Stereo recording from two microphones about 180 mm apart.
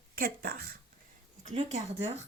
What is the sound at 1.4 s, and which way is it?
Speech, 35° right (ahead or behind).